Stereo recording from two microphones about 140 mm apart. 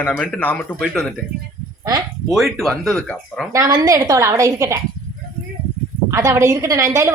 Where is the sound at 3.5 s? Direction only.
25° right (ahead or behind).